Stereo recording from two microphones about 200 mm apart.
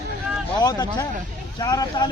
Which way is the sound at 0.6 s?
20° left (ahead or behind).